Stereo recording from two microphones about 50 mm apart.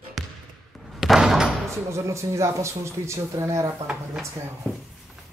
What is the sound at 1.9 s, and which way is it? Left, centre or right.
Speech, right.